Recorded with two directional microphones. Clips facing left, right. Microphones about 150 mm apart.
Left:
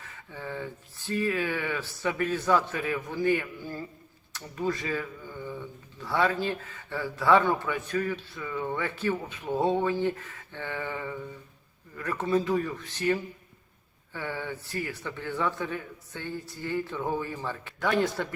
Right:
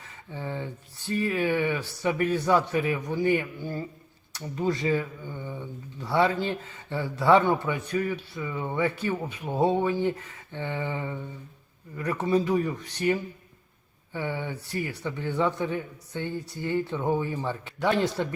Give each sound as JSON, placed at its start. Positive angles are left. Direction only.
{"t": 0.3, "sound": "speech", "side_deg": -20}